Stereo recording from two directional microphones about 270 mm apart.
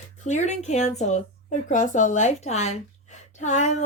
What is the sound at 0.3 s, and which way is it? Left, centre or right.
A woman's voice, left.